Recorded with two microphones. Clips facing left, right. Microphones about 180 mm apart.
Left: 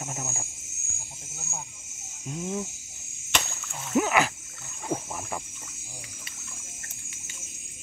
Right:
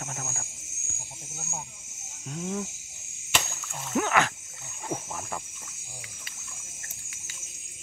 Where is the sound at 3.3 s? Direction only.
Centre (ahead or behind).